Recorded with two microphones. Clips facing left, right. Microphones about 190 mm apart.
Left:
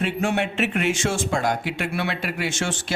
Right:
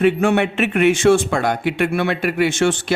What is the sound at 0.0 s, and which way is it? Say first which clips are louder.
A man's voice: right 8 dB; 60° right (ahead or behind).